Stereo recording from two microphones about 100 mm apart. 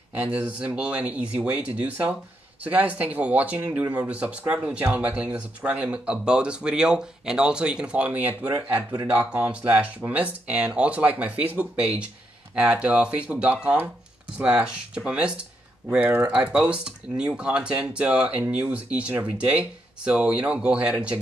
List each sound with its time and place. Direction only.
0.1 s speech: 10° right (ahead or behind)